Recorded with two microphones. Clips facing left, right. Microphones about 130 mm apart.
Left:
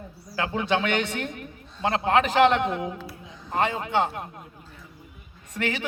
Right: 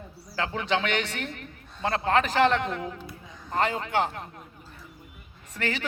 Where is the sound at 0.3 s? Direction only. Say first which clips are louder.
Left 2 dB; 15° left (ahead or behind).